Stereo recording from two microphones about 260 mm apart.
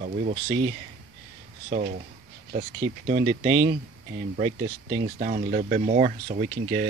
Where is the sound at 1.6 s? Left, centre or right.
Right.